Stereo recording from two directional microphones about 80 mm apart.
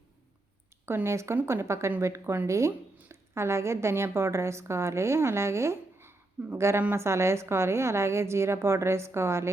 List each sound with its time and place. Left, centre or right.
0.9 s a woman's voice: right